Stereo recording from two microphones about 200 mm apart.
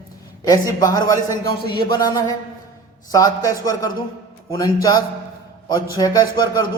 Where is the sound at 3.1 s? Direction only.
15° left (ahead or behind).